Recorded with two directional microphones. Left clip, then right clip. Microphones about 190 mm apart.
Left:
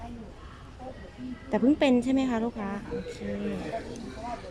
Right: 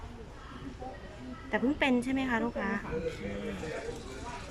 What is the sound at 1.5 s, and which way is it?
A woman's voice, 15° left (ahead or behind).